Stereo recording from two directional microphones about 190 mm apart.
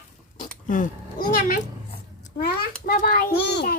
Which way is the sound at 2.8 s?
50° left (ahead or behind).